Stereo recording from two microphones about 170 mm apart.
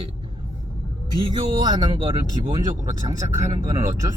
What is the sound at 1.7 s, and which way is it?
Speech, 25° right (ahead or behind).